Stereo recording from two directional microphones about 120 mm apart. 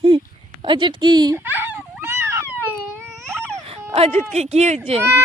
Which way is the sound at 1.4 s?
15° right (ahead or behind).